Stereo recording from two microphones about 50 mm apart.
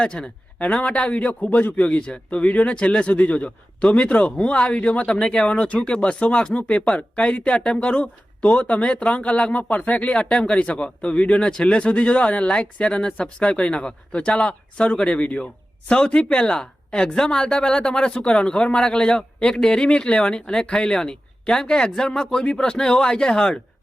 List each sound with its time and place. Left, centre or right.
0.0 s speech: centre
0.6 s speech: left
1.9 s speech: left